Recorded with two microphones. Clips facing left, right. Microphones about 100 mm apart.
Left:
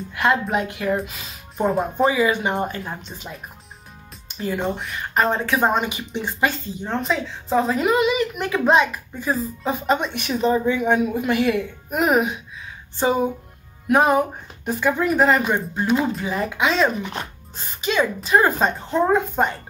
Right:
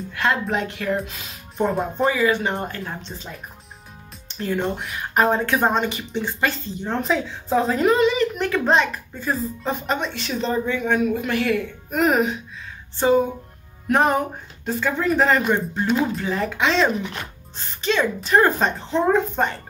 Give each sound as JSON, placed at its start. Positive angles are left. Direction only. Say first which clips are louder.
{"t": 0.1, "sound": "speech", "louder": "left 2 dB", "side_deg": 15}
{"t": 2.1, "sound": "speech", "louder": "left 1 dB", "side_deg": 15}
{"t": 4.4, "sound": "speech", "louder": "even", "side_deg": 5}
{"t": 5.7, "sound": "speech", "louder": "even", "side_deg": 10}
{"t": 6.9, "sound": "speech", "louder": "right 1 dB", "side_deg": 0}
{"t": 13.8, "sound": "speech", "louder": "left 2 dB", "side_deg": 5}